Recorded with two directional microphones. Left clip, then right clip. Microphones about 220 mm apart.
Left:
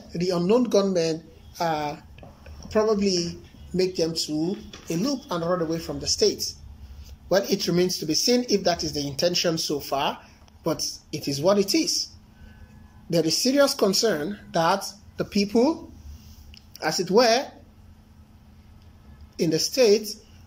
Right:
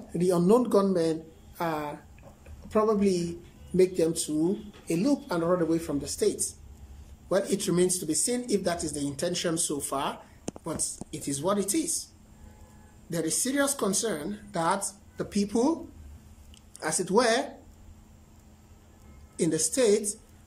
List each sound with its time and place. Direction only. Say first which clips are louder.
0.1 s a man's voice: left 1 dB; 10° right (ahead or behind)
11.8 s a woman's voice: left 8 dB; 60° right (ahead or behind)
13.1 s speech: left 8 dB; 5° left (ahead or behind)
19.3 s speech: left 5 dB; 5° right (ahead or behind)